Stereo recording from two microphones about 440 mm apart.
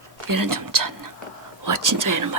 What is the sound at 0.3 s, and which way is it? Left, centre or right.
Speech, right.